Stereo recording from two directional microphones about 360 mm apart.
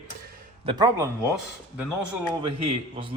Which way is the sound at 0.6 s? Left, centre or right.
Centre.